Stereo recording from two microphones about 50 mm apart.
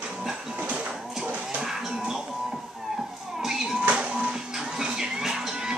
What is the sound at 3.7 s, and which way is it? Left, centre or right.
Music, right.